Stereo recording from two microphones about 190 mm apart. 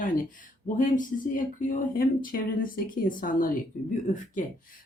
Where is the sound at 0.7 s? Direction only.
45° left (ahead or behind).